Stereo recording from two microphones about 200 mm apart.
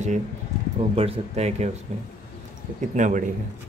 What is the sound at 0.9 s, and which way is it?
Speech, 30° right (ahead or behind).